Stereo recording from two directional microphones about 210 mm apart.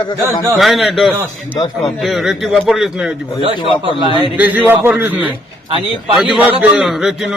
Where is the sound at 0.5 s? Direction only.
Centre (ahead or behind).